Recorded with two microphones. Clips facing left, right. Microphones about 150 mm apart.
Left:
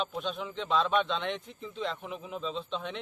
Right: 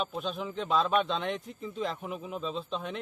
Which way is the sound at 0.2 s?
5° right (ahead or behind).